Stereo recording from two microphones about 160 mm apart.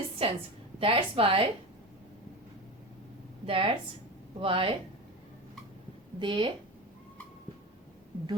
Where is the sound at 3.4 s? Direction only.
35° right (ahead or behind).